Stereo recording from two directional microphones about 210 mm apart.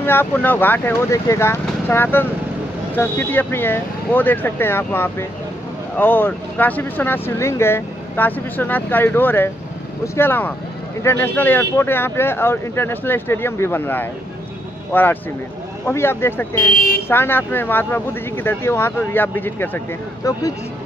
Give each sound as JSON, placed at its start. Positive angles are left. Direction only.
{"t": 0.0, "sound": "speech", "side_deg": 10}
{"t": 16.7, "sound": "speech", "side_deg": 45}
{"t": 17.1, "sound": "speech", "side_deg": 10}